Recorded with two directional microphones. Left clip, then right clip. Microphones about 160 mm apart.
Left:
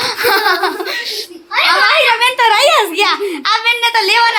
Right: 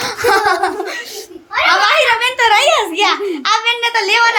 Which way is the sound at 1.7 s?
15° left (ahead or behind).